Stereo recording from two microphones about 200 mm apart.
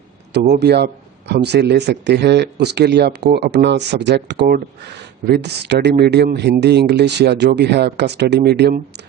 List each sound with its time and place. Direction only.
0.3 s speech: 55° right (ahead or behind)